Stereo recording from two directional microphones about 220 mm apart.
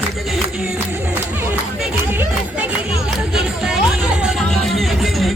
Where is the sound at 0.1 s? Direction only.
Centre (ahead or behind).